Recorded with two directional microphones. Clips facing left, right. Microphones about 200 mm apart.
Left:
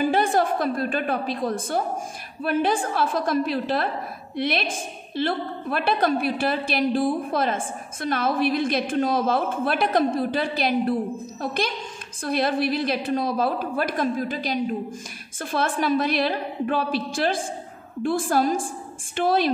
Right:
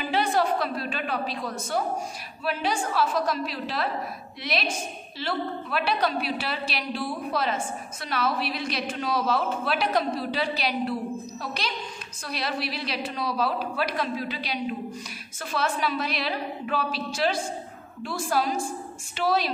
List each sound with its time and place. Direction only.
0.0 s a woman's voice: 50° left (ahead or behind)